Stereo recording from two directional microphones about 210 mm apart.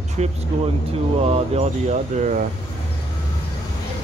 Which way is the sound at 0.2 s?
30° right (ahead or behind).